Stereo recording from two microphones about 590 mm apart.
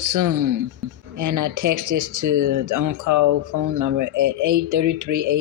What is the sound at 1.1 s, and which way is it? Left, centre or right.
Speech, right.